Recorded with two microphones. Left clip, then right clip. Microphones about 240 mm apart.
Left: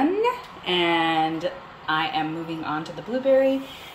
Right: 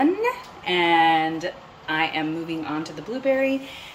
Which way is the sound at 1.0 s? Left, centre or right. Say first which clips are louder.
Right 3 dB; right.